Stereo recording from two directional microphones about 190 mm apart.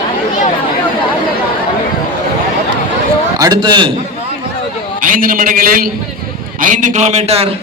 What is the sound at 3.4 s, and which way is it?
Speech, 20° right (ahead or behind).